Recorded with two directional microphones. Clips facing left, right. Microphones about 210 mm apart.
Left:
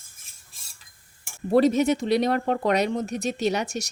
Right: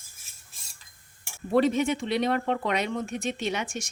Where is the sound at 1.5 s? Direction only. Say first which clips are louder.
Left 4 dB; 40° left (ahead or behind).